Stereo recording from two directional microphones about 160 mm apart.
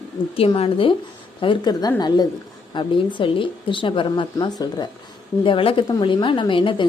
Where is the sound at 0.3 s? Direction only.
40° left (ahead or behind).